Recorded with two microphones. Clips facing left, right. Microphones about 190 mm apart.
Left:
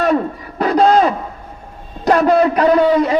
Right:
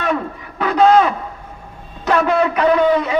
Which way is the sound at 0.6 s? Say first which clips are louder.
Left 1 dB; 35° left (ahead or behind).